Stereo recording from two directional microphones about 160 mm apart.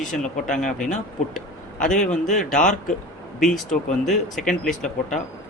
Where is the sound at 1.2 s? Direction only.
50° left (ahead or behind).